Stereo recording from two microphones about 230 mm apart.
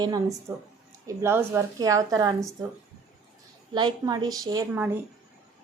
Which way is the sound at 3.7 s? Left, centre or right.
Centre.